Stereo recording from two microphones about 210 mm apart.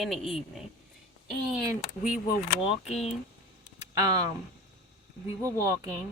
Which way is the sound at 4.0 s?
15° right (ahead or behind).